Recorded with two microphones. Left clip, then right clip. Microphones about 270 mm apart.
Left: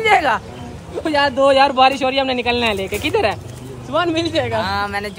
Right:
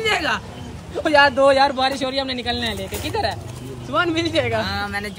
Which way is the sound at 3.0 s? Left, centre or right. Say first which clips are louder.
Left 6 dB; left.